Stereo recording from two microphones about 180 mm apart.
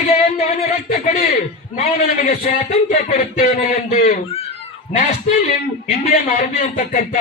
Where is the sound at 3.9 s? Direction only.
35° left (ahead or behind).